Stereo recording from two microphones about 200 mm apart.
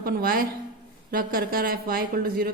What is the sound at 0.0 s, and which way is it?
A woman's voice, 45° right (ahead or behind).